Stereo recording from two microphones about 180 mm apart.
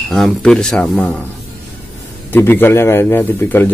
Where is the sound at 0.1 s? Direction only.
Centre (ahead or behind).